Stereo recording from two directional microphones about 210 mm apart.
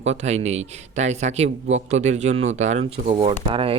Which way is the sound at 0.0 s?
30° right (ahead or behind).